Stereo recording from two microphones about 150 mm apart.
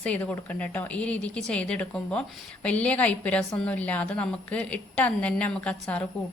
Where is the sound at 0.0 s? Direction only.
10° left (ahead or behind).